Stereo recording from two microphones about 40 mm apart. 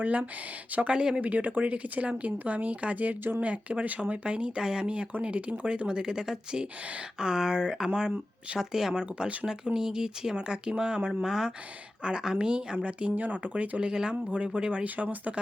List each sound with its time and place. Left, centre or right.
0.0 s speech: right
0.9 s speech: centre
1.2 s speech: right
4.0 s speech: right
14.8 s speech: right